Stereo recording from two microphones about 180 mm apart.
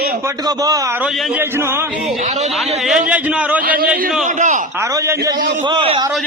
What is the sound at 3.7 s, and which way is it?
Speech, 50° right (ahead or behind).